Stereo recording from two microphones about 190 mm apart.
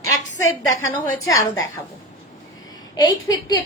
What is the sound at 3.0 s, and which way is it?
Speech, 20° left (ahead or behind).